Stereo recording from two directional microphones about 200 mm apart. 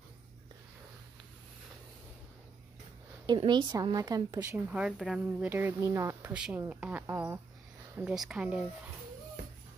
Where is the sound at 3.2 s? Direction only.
20° right (ahead or behind).